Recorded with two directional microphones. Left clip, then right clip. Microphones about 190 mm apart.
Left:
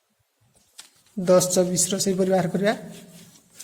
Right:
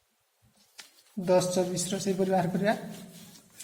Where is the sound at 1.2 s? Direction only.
45° left (ahead or behind).